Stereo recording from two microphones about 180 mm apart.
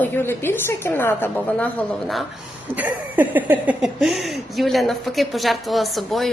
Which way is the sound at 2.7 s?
10° right (ahead or behind).